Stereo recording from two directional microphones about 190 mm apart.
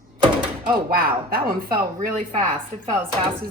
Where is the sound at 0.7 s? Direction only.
50° right (ahead or behind).